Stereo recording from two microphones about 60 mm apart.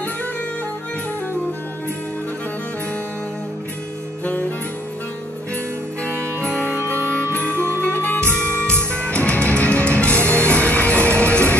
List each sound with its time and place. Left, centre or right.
4.2 s music: left
6.0 s music: right
8.0 s music: left
8.6 s music: right
9.1 s music: left